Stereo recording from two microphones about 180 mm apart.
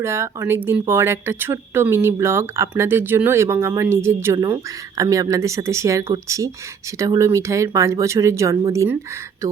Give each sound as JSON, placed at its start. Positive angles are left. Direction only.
{"t": 0.0, "sound": "speech", "side_deg": -15}